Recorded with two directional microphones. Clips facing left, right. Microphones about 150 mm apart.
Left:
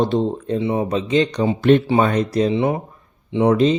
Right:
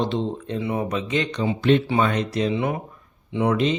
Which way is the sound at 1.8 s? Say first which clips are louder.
Left 5 dB; 35° left (ahead or behind).